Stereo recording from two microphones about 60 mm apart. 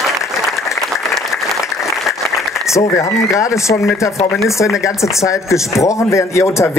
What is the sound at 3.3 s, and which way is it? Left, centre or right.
Speech, left.